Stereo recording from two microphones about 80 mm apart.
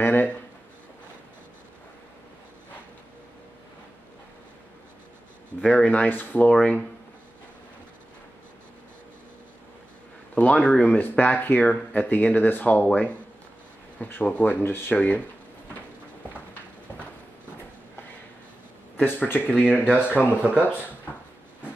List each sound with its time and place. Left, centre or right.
0.0 s a sound: left
5.6 s speech: centre
10.3 s speech: centre
11.0 s speech: left
13.9 s speech: left
18.9 s speech: left
19.5 s speech: centre
19.9 s speech: left